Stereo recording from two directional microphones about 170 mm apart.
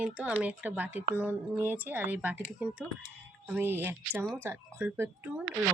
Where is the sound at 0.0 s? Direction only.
10° right (ahead or behind).